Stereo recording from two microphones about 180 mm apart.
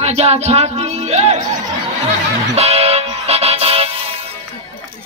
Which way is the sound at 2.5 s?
35° right (ahead or behind).